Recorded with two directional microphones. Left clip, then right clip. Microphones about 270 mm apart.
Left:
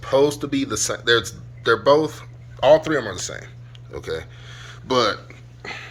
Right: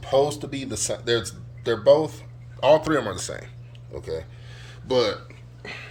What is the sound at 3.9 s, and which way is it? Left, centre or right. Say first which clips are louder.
Speech: left 3 dB; centre.